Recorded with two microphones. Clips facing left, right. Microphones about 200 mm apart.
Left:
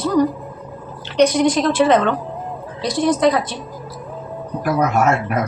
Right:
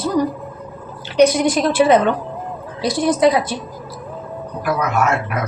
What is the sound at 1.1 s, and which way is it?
A woman's voice, 5° right (ahead or behind).